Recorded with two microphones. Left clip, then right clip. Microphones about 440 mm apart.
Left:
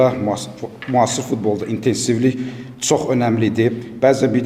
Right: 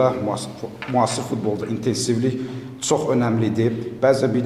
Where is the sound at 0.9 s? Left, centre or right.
Left.